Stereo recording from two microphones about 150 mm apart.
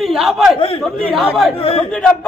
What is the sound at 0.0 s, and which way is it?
A man's voice, centre (ahead or behind).